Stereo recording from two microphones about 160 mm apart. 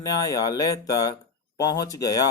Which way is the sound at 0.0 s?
25° left (ahead or behind).